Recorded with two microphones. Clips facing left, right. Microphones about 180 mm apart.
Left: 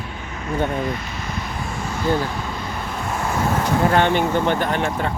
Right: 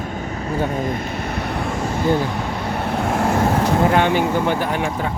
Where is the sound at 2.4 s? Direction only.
65° right (ahead or behind).